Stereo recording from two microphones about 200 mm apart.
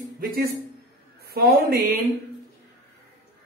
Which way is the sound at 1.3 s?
50° right (ahead or behind).